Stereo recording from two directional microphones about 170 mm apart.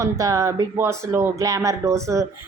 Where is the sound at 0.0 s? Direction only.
20° right (ahead or behind).